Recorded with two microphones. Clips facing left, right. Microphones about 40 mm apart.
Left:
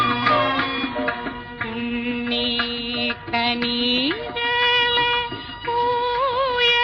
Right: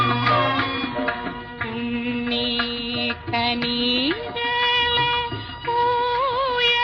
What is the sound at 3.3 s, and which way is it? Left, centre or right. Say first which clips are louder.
Music: left 1 dB; centre.